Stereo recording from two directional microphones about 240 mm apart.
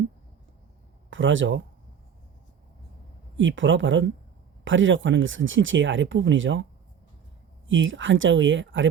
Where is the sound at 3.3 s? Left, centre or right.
Right.